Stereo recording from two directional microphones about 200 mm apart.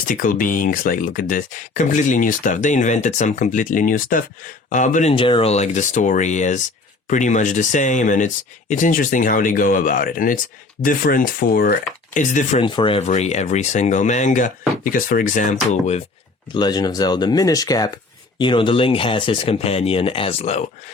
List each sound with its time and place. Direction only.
0.1 s speech: 40° left (ahead or behind)
5.1 s speech: 25° left (ahead or behind)
12.6 s speech: 25° left (ahead or behind); by 15.4 s 40° left (ahead or behind)
16.6 s speech: 20° left (ahead or behind)